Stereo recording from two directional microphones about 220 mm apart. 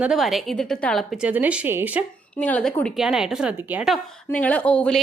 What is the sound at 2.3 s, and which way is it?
A woman's voice, 5° left (ahead or behind).